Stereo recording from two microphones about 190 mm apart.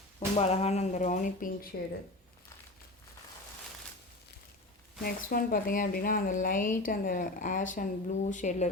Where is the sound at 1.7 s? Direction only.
55° left (ahead or behind).